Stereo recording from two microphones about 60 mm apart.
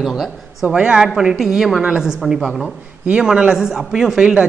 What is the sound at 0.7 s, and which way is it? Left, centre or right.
Speech, centre.